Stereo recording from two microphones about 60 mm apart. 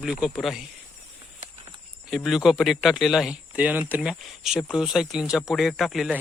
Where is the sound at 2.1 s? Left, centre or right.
Centre.